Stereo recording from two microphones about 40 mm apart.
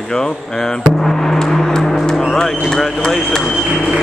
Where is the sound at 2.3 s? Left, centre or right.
Centre.